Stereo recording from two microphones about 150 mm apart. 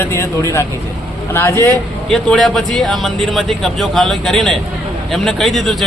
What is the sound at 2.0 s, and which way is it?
Speech, 5° left (ahead or behind).